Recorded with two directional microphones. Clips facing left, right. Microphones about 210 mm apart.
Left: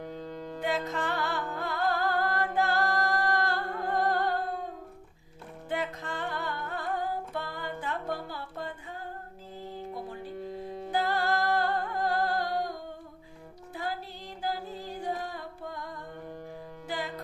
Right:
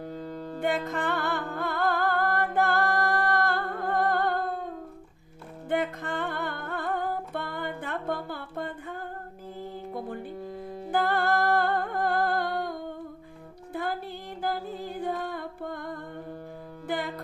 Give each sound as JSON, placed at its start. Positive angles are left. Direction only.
{"t": 0.6, "sound": "music", "side_deg": -55}
{"t": 5.6, "sound": "music", "side_deg": -55}
{"t": 10.9, "sound": "humming", "side_deg": -55}
{"t": 13.7, "sound": "music", "side_deg": -55}